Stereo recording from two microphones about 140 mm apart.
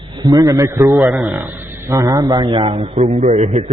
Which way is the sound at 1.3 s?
15° right (ahead or behind).